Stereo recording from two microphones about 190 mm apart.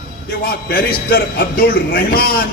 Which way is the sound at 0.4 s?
50° left (ahead or behind).